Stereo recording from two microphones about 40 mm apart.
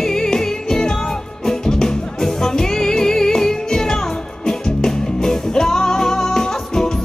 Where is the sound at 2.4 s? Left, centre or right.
Centre.